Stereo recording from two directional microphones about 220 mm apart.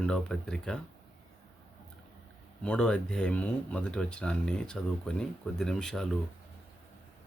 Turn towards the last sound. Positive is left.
turn(degrees=5)  # may be behind; listen again after turning